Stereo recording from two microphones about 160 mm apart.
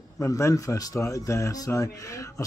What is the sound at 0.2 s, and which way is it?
Speech, 20° left (ahead or behind).